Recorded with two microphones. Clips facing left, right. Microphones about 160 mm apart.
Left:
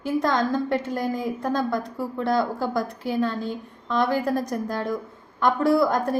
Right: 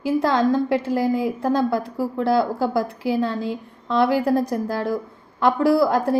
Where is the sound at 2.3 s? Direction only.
5° right (ahead or behind).